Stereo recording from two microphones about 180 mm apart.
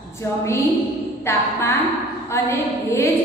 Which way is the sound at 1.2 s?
15° left (ahead or behind).